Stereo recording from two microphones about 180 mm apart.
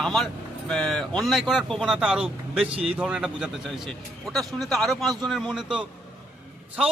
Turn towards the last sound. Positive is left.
turn(degrees=0)  # may be behind; listen again after turning